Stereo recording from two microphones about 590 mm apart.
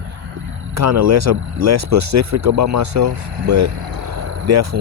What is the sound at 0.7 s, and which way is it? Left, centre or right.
Speech, right.